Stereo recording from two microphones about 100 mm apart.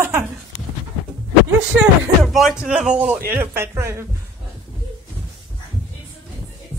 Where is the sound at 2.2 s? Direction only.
Centre (ahead or behind); by 4.0 s 25° right (ahead or behind).